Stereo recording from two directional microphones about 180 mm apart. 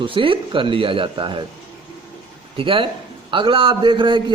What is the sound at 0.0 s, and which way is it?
A man's voice, 30° right (ahead or behind).